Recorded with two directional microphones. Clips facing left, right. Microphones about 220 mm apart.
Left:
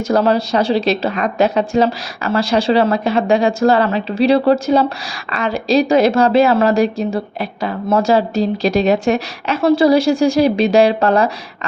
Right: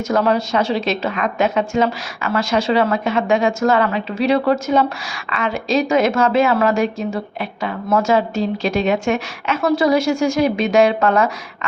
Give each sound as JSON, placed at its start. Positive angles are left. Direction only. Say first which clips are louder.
{"t": 0.1, "sound": "a woman's voice", "louder": "left 3 dB", "side_deg": 35}